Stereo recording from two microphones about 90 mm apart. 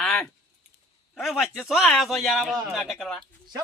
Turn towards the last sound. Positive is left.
turn(degrees=0)  # may be behind; listen again after turning